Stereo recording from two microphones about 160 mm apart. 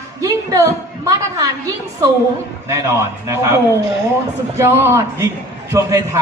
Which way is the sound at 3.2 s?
15° right (ahead or behind).